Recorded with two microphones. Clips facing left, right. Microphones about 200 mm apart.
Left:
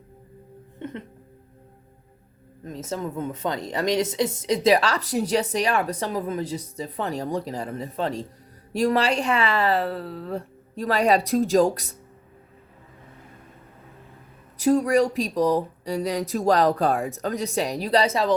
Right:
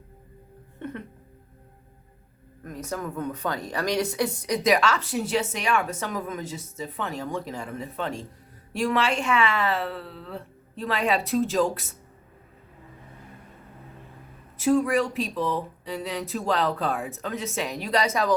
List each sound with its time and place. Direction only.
0.8 s music: 20° left (ahead or behind)
2.6 s speech: 25° left (ahead or behind); by 11.9 s 40° left (ahead or behind)
14.6 s speech: 40° left (ahead or behind)